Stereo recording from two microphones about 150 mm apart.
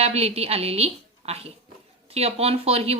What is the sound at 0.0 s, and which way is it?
A woman's voice, 45° right (ahead or behind).